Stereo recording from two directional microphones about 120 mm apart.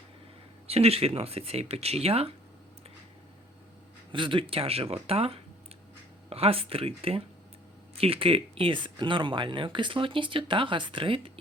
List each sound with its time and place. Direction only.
0.7 s speech: 60° right (ahead or behind)
4.1 s speech: 45° right (ahead or behind)